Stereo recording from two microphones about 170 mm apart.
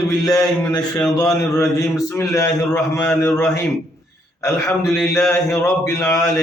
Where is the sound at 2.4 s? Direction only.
15° left (ahead or behind).